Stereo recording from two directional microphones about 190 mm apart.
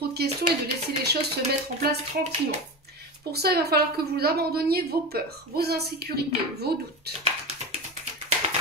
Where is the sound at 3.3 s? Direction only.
55° right (ahead or behind).